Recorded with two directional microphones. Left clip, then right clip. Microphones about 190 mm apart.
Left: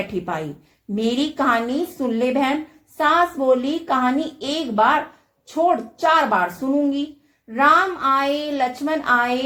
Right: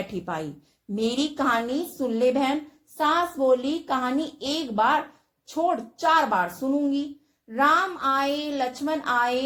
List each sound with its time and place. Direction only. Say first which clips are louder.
0.9 s a woman's voice: left 4 dB; 40° right (ahead or behind)